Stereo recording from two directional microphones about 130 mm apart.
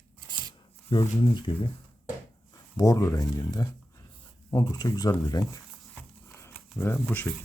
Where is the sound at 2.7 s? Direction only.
25° left (ahead or behind).